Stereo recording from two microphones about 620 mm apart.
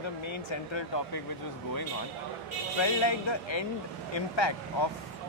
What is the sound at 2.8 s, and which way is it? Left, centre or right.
Speech, left.